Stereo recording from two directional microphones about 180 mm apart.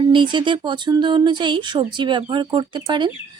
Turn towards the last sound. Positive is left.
turn(degrees=-25)  # may be behind; listen again after turning